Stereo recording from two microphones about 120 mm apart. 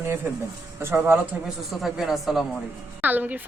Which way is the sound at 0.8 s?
20° right (ahead or behind).